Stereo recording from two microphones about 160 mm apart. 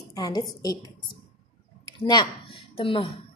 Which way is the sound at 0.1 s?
25° left (ahead or behind).